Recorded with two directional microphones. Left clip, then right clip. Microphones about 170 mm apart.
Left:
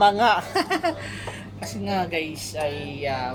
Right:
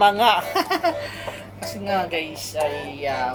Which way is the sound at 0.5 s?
Centre (ahead or behind).